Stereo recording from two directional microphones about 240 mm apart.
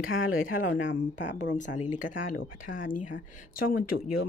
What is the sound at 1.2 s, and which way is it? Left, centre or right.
Speech, left.